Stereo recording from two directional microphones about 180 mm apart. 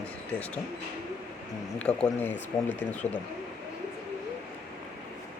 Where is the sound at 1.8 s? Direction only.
5° left (ahead or behind).